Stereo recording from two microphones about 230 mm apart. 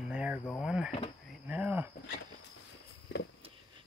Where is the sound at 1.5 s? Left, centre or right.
Centre.